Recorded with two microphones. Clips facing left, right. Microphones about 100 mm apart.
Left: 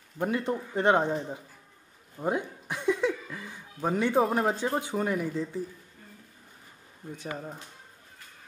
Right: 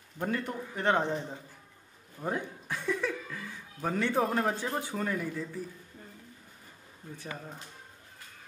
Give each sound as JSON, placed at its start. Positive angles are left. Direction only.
{"t": 0.2, "sound": "speech", "side_deg": 20}
{"t": 7.2, "sound": "speech", "side_deg": 20}